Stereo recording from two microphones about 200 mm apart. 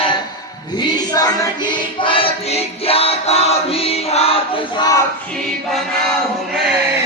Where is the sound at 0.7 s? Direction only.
20° left (ahead or behind).